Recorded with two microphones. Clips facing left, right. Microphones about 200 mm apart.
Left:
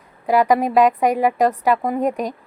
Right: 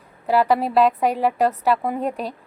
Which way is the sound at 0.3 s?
10° left (ahead or behind).